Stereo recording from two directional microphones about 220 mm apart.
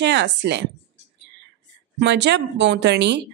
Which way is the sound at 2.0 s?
50° right (ahead or behind).